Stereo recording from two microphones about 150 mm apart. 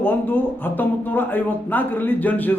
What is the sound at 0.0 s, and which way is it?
A man's voice, 15° left (ahead or behind).